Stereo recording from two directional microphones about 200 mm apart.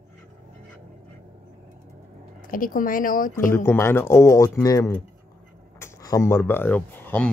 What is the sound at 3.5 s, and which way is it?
Speech, 15° left (ahead or behind).